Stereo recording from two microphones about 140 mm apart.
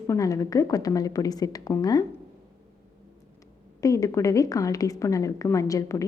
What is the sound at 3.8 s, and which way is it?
Speech, 25° left (ahead or behind).